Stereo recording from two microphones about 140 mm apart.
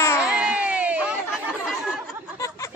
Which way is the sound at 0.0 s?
20° left (ahead or behind).